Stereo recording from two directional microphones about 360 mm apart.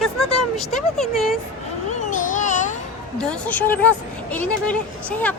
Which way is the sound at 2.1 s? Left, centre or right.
Left.